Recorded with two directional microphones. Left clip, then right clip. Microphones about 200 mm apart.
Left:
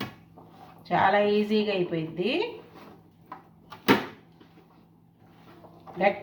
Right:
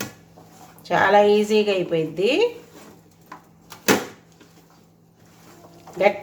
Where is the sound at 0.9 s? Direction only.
50° right (ahead or behind).